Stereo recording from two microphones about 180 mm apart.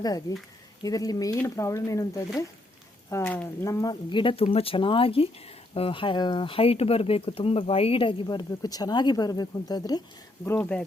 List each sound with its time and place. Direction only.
0.0 s speech: 20° left (ahead or behind)